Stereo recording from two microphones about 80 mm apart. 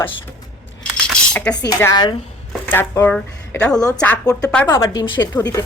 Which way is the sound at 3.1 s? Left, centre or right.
Centre.